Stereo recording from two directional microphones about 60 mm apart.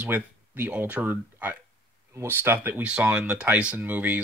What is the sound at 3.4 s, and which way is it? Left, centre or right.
Speech, right.